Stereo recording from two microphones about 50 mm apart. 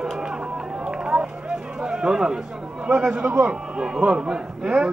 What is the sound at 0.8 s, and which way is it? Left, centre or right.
Run, centre.